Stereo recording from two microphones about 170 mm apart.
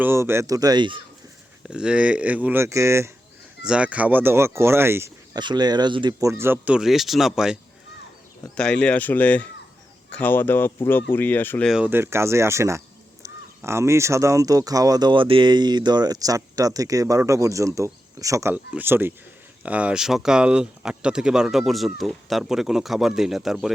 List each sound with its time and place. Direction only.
0.0 s speech: 15° right (ahead or behind)
1.6 s speech: 5° right (ahead or behind); by 11.7 s 10° left (ahead or behind)
11.7 s speech: 10° right (ahead or behind)